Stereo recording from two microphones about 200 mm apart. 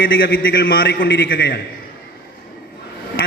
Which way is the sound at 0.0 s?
45° left (ahead or behind).